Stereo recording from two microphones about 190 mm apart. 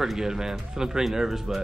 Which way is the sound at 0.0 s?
Centre (ahead or behind).